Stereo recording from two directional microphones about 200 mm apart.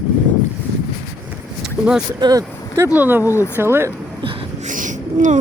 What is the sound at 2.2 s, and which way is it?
Speech, 20° right (ahead or behind).